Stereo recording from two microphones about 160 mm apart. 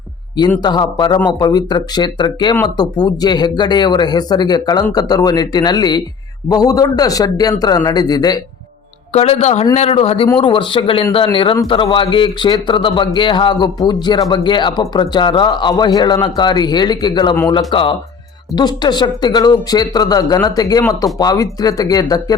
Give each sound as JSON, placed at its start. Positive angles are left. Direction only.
{"t": 0.6, "sound": "speech", "side_deg": 25}
{"t": 9.1, "sound": "a man's voice", "side_deg": 40}